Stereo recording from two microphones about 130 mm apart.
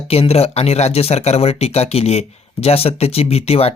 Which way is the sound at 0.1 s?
50° left (ahead or behind).